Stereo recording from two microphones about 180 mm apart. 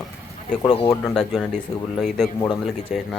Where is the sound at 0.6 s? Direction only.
30° left (ahead or behind).